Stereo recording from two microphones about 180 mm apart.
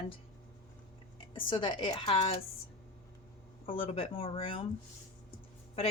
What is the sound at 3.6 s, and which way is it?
Speech, 35° left (ahead or behind).